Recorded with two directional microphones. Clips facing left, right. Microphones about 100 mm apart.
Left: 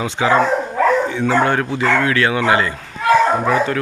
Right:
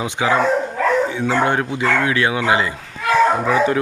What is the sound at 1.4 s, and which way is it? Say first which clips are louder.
Speech: left 1 dB; 20° right (ahead or behind).